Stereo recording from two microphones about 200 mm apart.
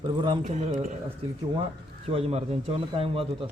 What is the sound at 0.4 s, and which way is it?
Speech, 35° right (ahead or behind).